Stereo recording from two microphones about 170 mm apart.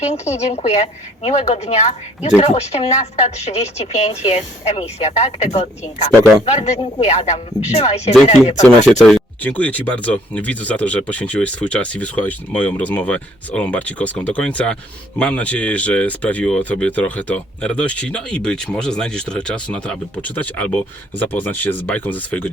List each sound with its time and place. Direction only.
0.1 s speech: 40° left (ahead or behind)
8.9 s speech: centre (ahead or behind)